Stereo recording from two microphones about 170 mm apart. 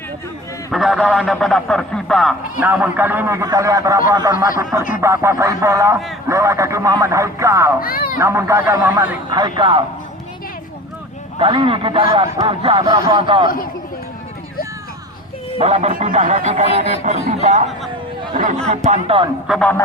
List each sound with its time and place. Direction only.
0.7 s a man's voice: centre (ahead or behind)
2.6 s a man's voice: 10° right (ahead or behind)
7.8 s a child's voice: 60° left (ahead or behind)
8.2 s a man's voice: 15° right (ahead or behind)
9.3 s speech: 25° right (ahead or behind)
11.3 s a man's voice: 30° right (ahead or behind)
15.5 s a man's voice: 35° right (ahead or behind)
15.9 s a man's voice: 50° right (ahead or behind)
18.7 s a man's voice: 40° right (ahead or behind)
19.5 s speech: 5° left (ahead or behind)